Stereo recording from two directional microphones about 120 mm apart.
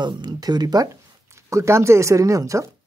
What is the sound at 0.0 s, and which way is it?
Speech, 35° right (ahead or behind).